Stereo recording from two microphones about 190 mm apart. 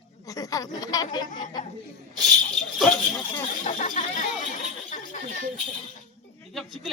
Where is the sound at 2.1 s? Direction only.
Centre (ahead or behind).